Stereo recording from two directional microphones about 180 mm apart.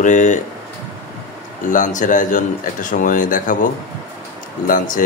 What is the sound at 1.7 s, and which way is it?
Speech, 45° left (ahead or behind).